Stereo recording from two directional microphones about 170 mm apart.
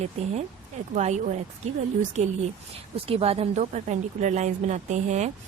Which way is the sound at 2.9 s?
35° right (ahead or behind).